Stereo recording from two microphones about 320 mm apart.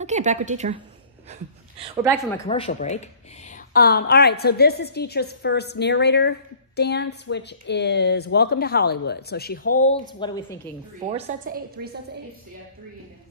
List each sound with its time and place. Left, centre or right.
0.0 s a woman's voice: right
2.4 s a woman's voice: centre
10.1 s a woman's voice: centre
11.0 s a woman's voice: right